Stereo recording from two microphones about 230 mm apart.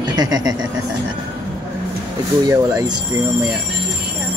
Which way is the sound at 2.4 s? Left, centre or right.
Centre.